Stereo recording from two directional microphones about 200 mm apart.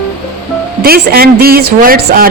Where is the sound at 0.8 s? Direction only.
50° right (ahead or behind).